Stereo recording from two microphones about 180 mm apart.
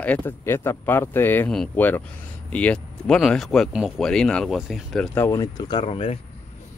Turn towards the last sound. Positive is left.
turn(degrees=30)  # may be behind; listen again after turning